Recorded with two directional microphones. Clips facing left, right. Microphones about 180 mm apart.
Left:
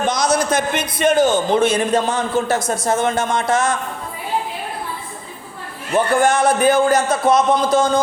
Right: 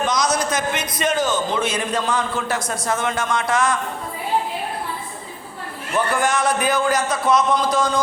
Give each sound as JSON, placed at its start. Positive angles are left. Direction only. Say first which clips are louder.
{"t": 0.0, "sound": "a sound", "louder": "left 3 dB", "side_deg": 30}
{"t": 0.5, "sound": "a man's voice", "louder": "left 4 dB", "side_deg": 55}
{"t": 1.2, "sound": "a man's voice", "louder": "left 6 dB", "side_deg": 30}
{"t": 5.9, "sound": "a man's voice", "louder": "left 5 dB", "side_deg": 25}